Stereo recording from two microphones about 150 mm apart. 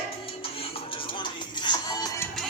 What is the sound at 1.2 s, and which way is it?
Music, 30° left (ahead or behind).